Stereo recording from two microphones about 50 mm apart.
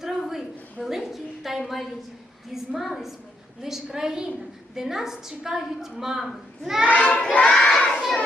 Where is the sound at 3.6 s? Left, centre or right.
Centre.